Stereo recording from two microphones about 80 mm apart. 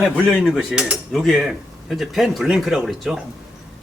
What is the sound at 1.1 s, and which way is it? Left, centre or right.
Speech, centre.